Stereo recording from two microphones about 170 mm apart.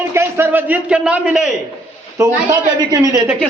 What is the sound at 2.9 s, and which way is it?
Speech, 20° right (ahead or behind).